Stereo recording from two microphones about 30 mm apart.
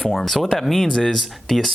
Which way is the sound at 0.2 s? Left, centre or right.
Centre.